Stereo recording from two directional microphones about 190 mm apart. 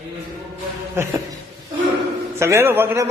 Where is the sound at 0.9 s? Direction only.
15° right (ahead or behind).